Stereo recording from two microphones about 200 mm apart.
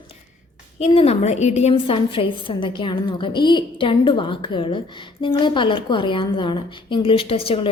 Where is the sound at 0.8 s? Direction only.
30° left (ahead or behind).